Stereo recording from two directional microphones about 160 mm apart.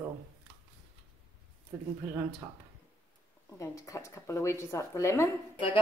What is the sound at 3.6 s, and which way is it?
Speech, 20° left (ahead or behind).